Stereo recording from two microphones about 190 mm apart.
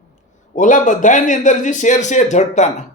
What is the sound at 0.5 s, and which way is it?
A man's voice, 40° left (ahead or behind).